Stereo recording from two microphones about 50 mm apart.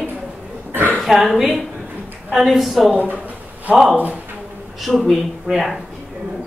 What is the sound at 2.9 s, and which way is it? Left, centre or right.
Speech, right.